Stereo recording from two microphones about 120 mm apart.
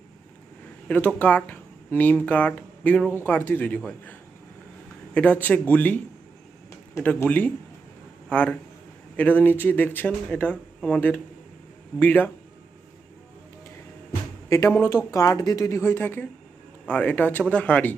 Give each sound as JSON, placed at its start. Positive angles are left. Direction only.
{"t": 0.9, "sound": "speech", "side_deg": 10}
{"t": 5.1, "sound": "speech", "side_deg": 10}
{"t": 7.2, "sound": "speech", "side_deg": 15}
{"t": 14.5, "sound": "a woman's voice", "side_deg": 25}